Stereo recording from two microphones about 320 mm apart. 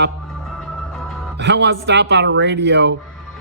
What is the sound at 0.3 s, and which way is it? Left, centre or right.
Music, centre.